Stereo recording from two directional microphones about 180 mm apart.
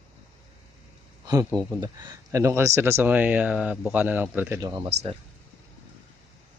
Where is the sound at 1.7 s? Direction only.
20° right (ahead or behind).